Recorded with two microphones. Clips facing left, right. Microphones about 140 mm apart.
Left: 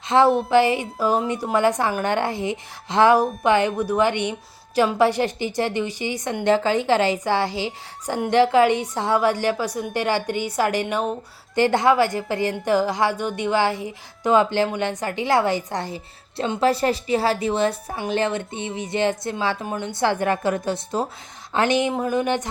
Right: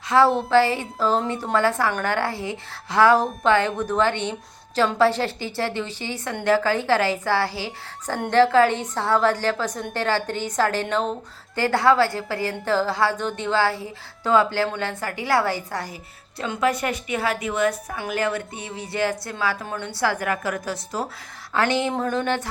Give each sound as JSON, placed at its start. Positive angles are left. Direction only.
{"t": 0.3, "sound": "a woman's voice", "side_deg": 15}